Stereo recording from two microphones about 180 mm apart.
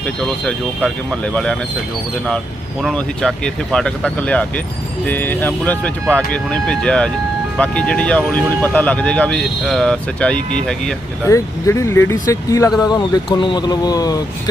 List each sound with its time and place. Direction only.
0.0 s speech: 5° left (ahead or behind)
2.8 s speech: 5° left (ahead or behind)
11.3 s speech: 15° left (ahead or behind)